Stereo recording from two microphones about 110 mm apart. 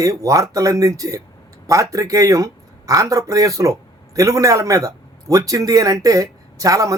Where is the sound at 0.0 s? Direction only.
30° right (ahead or behind).